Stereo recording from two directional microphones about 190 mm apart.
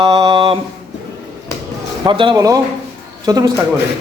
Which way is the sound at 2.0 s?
25° right (ahead or behind).